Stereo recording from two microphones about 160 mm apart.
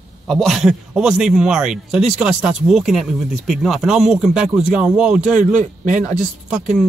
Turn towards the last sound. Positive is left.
turn(degrees=-5)  # may be behind; listen again after turning